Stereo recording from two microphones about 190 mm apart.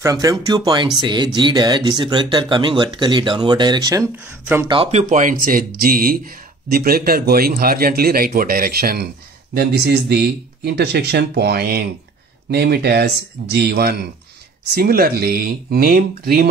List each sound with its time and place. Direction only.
0.0 s speech: 20° right (ahead or behind)
4.6 s speech: 30° right (ahead or behind)
5.1 s speech: 45° right (ahead or behind)